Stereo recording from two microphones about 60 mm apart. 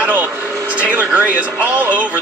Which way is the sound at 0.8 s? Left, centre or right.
Right.